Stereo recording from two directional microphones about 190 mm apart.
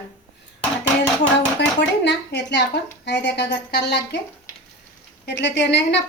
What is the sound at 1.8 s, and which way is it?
A woman's voice, 65° left (ahead or behind).